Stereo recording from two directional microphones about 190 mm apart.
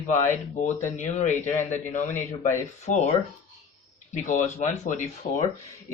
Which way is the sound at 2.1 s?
15° left (ahead or behind).